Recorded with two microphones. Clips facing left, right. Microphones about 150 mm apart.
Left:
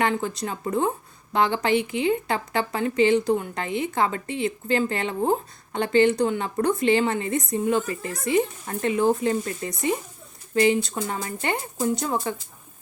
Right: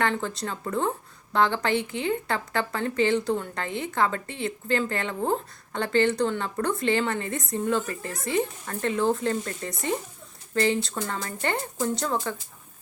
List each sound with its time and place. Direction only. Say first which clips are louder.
0.0 s a woman's voice: left 2 dB; 15° left (ahead or behind)